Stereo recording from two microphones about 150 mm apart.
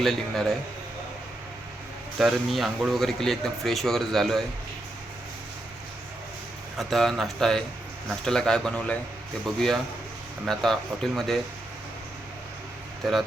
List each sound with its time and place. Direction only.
0.0 s speech: centre (ahead or behind)
2.1 s speech: centre (ahead or behind)
6.7 s speech: centre (ahead or behind)